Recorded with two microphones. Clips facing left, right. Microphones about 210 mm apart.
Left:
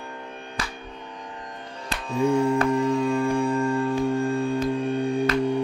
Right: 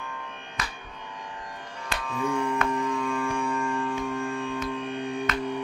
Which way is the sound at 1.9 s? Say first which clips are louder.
Left 7 dB; 25° left (ahead or behind).